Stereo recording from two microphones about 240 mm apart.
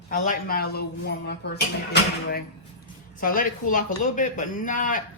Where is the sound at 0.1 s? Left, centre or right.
Left.